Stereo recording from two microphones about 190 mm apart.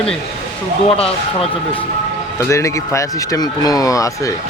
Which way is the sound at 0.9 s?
30° left (ahead or behind).